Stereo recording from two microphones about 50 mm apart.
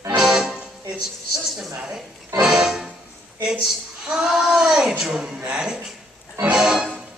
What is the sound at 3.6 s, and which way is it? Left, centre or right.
A woman's voice, centre.